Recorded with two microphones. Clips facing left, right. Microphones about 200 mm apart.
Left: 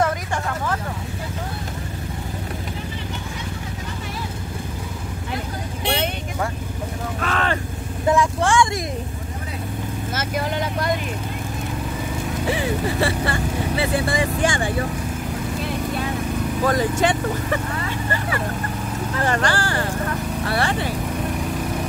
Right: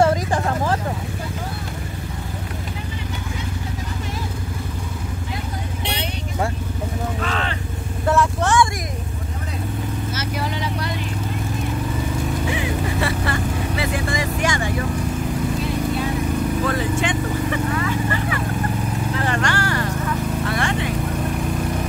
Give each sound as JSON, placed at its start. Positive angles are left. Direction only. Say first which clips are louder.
{"t": 0.0, "sound": "vehicle", "louder": "right 5 dB", "side_deg": -30}
{"t": 7.2, "sound": "a sound", "louder": "left 6 dB", "side_deg": 55}
{"t": 8.1, "sound": "vehicle", "louder": "even", "side_deg": 10}
{"t": 10.1, "sound": "vehicle", "louder": "left 6 dB", "side_deg": 50}
{"t": 12.5, "sound": "vehicle", "louder": "left 1 dB", "side_deg": 30}
{"t": 16.6, "sound": "vehicle", "louder": "left 2 dB", "side_deg": 40}
{"t": 19.2, "sound": "clip-clop", "louder": "left 3 dB", "side_deg": 30}
{"t": 20.4, "sound": "vehicle", "louder": "left 4 dB", "side_deg": 35}